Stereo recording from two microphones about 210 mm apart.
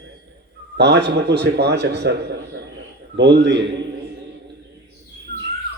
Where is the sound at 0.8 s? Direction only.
55° right (ahead or behind).